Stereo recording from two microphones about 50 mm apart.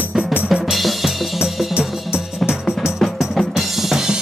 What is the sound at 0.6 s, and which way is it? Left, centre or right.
Drum kit, centre.